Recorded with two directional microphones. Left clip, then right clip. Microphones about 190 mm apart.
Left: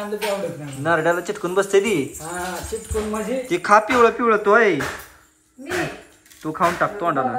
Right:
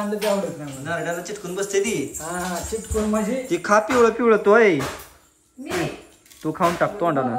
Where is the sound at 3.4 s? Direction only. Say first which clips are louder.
Left 4 dB; 15° right (ahead or behind).